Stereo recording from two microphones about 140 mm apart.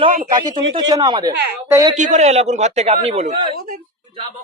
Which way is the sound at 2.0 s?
60° right (ahead or behind).